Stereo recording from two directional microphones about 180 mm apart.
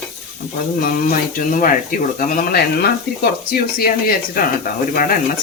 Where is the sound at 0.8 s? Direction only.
50° left (ahead or behind).